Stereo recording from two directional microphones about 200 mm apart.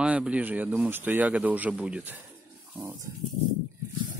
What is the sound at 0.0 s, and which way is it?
Speech, 5° right (ahead or behind).